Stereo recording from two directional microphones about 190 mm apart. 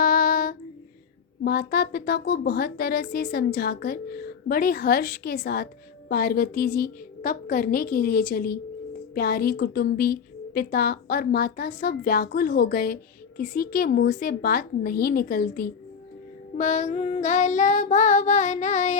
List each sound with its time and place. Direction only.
0.0 s child singing: 50° left (ahead or behind)
1.5 s a woman's voice: 55° left (ahead or behind)
16.6 s child singing: 40° left (ahead or behind)